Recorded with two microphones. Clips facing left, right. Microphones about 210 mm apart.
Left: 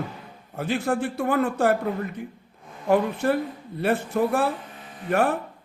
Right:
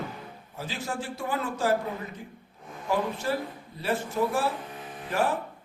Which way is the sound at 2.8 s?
60° left (ahead or behind).